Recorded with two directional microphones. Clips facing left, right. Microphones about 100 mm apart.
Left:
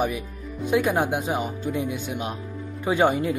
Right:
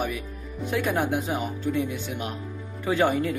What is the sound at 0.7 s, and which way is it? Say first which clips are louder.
Speech: left 3 dB; 15° left (ahead or behind).